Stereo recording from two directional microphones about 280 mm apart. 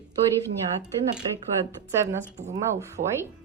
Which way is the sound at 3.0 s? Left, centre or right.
Right.